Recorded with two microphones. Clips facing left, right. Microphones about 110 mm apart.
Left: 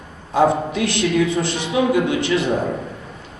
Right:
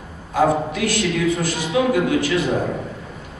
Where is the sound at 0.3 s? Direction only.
25° left (ahead or behind).